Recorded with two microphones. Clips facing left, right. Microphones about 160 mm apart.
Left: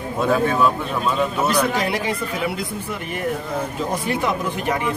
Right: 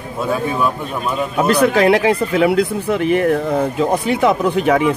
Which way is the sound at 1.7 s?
80° right.